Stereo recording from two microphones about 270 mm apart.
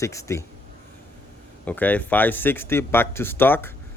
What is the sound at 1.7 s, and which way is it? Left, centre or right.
Speech, centre.